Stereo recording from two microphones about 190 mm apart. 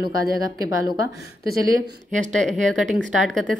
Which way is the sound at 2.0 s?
40° right (ahead or behind).